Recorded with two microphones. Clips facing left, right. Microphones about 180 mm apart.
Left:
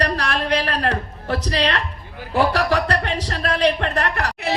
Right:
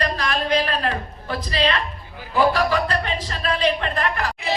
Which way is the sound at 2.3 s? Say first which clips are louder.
Even; 75° left (ahead or behind).